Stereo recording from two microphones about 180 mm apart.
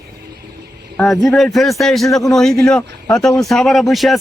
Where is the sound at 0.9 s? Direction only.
Centre (ahead or behind).